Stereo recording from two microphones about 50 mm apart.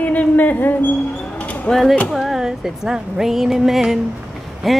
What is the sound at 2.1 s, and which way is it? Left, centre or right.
Speech, centre.